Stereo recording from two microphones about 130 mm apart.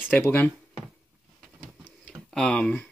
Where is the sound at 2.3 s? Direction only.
5° left (ahead or behind).